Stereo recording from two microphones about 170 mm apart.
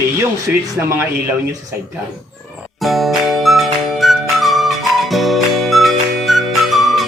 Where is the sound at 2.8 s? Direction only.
Centre (ahead or behind).